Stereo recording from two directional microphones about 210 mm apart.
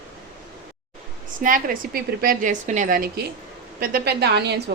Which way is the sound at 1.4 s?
45° right (ahead or behind).